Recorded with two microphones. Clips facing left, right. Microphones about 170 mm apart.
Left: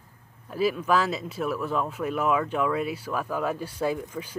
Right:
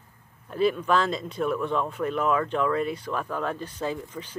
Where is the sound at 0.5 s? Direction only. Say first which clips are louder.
Right 1 dB; 5° left (ahead or behind).